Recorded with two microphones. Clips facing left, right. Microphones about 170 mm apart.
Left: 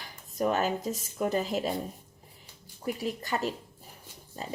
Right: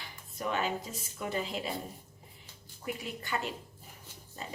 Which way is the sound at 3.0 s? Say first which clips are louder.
Left 6 dB; 40° left (ahead or behind).